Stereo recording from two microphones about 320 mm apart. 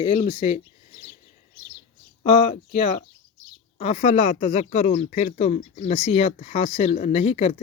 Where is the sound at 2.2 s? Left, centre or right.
Left.